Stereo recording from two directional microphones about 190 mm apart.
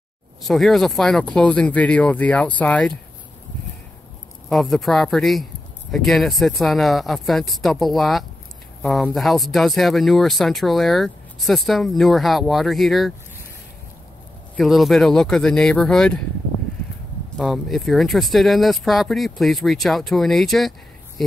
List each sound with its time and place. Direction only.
0.4 s speech: centre (ahead or behind)
4.5 s speech: centre (ahead or behind)
14.6 s speech: centre (ahead or behind)
17.4 s speech: centre (ahead or behind)